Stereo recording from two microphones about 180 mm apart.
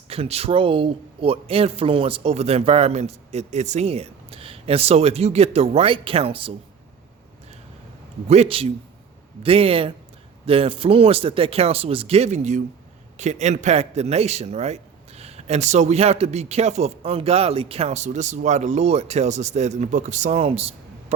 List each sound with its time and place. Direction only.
0.1 s a man's voice: 35° right (ahead or behind)
8.3 s a man's voice: 35° right (ahead or behind)